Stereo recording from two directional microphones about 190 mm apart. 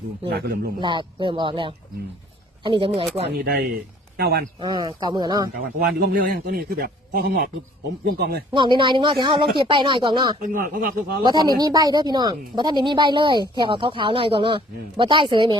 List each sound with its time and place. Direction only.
0.3 s speech: 55° right (ahead or behind)
0.8 s speech: 25° right (ahead or behind)
3.2 s speech: 55° right (ahead or behind)
4.6 s speech: 20° right (ahead or behind)
5.8 s a man's voice: 55° right (ahead or behind)
8.5 s speech: 25° right (ahead or behind)
10.4 s a man's voice: 45° right (ahead or behind)
11.2 s speech: 20° right (ahead or behind)